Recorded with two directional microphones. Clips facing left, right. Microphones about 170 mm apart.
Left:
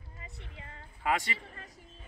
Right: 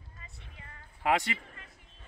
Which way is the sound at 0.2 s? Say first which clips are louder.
Left 5 dB; 20° left (ahead or behind).